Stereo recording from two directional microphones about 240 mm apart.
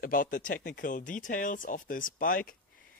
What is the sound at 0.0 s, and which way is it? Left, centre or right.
Speech, left.